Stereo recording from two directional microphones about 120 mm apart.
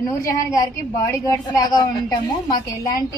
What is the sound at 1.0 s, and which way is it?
A woman's voice, 30° left (ahead or behind).